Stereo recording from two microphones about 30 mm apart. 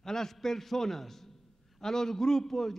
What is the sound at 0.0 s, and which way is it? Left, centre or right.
A man's voice, centre.